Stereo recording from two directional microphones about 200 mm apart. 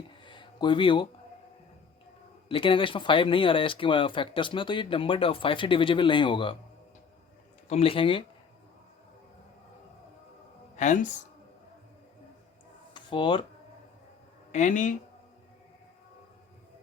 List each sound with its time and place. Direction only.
0.3 s a sound: 25° left (ahead or behind)
2.5 s speech: 25° left (ahead or behind)
7.7 s speech: 30° left (ahead or behind)
10.8 s speech: 40° left (ahead or behind)
12.9 s a sound: 25° left (ahead or behind)
14.5 s speech: 40° left (ahead or behind)